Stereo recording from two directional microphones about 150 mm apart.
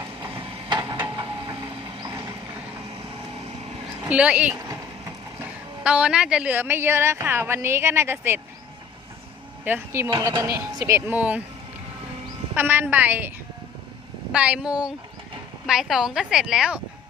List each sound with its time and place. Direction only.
0.2 s vehicle: 35° right (ahead or behind)
4.1 s a woman's voice: 10° right (ahead or behind)
4.5 s vehicle: 20° right (ahead or behind)
5.8 s a woman's voice: 10° right (ahead or behind)
9.6 s a woman's voice: 15° right (ahead or behind)
12.5 s a woman's voice: 15° right (ahead or behind)
14.3 s a woman's voice: 10° right (ahead or behind)